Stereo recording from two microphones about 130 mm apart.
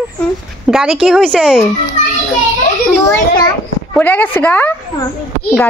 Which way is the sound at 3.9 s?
15° left (ahead or behind).